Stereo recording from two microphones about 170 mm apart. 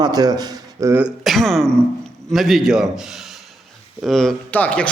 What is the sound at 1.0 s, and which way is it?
A man's voice, centre (ahead or behind).